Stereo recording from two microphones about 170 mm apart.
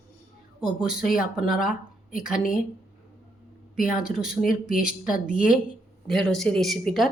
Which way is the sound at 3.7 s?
55° left (ahead or behind).